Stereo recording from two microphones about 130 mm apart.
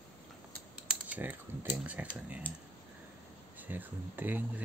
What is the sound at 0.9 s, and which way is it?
Speech, 10° right (ahead or behind).